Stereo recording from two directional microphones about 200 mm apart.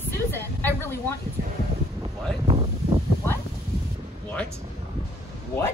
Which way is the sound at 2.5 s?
30° right (ahead or behind).